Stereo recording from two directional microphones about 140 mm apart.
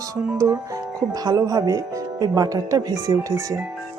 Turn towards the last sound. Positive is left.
turn(degrees=-20)  # may be behind; listen again after turning